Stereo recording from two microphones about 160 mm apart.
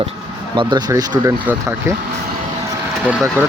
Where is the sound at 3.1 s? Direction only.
5° right (ahead or behind).